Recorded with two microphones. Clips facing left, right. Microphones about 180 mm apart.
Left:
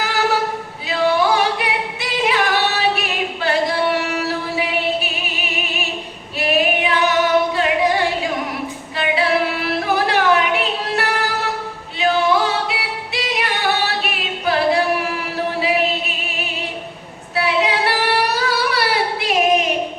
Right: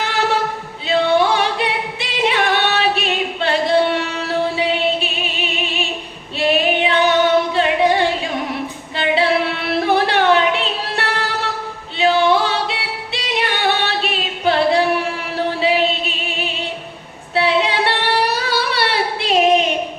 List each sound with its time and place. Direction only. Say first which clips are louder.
0.0 s a capella: even; 25° right (ahead or behind)
4.5 s music: right 2 dB; 25° right (ahead or behind)
6.3 s female singing: right 1 dB; 30° right (ahead or behind)
9.6 s music: right 2 dB; 30° right (ahead or behind)
17.3 s female singing: right 2 dB; 30° right (ahead or behind)